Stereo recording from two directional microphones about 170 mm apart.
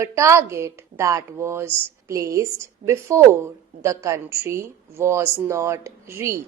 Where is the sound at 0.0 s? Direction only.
15° right (ahead or behind).